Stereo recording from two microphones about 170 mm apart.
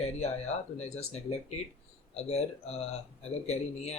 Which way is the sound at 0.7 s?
40° left (ahead or behind).